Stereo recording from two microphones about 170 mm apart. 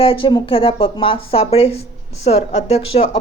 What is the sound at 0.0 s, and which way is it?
Speech, 30° left (ahead or behind).